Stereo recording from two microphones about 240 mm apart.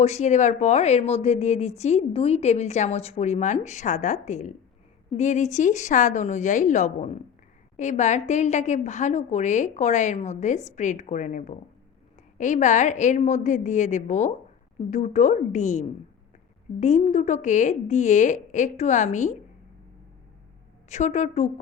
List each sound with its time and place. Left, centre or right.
0.0 s a woman's voice: left
20.9 s speech: left